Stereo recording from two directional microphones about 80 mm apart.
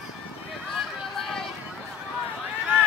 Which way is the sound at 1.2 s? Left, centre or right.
Centre.